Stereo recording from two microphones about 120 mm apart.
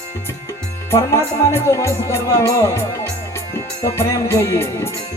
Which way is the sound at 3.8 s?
25° left (ahead or behind).